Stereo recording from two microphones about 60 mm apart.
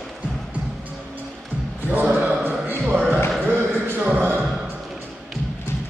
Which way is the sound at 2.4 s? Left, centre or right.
Right.